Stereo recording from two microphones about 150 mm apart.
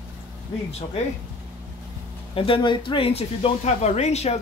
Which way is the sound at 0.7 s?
45° left (ahead or behind).